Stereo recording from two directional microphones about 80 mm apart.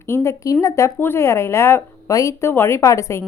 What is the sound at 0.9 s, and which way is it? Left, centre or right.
A woman's voice, left.